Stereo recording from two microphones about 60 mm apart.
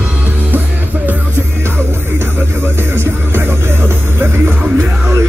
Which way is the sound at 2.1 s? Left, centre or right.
Right.